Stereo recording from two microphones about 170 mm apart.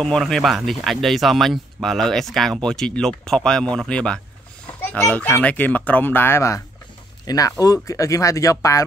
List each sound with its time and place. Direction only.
0.0 s speech: 5° left (ahead or behind); by 8.8 s 20° left (ahead or behind)